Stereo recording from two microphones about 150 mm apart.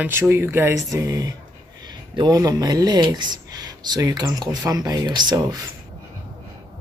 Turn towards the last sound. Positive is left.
turn(degrees=-30)  # may be behind; listen again after turning